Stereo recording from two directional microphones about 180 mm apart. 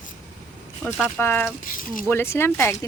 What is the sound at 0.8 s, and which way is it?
Speech, 10° left (ahead or behind).